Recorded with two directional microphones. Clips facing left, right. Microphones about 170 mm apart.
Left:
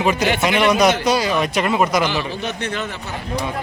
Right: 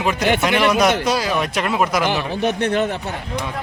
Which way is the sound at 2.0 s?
55° right (ahead or behind).